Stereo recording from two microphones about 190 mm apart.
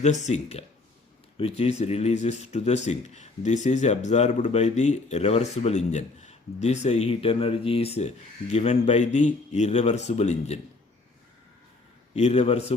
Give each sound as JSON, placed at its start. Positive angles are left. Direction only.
{"t": 0.0, "sound": "speech", "side_deg": 35}
{"t": 12.1, "sound": "speech", "side_deg": 35}